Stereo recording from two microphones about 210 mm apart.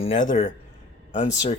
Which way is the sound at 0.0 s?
35° left (ahead or behind).